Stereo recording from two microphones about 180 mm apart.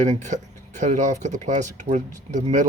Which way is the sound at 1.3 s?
40° right (ahead or behind).